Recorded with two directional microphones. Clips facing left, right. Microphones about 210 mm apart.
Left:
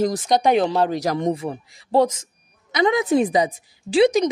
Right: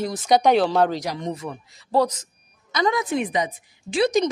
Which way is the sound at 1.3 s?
30° left (ahead or behind).